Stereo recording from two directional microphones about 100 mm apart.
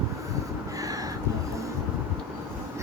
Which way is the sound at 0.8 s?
35° right (ahead or behind).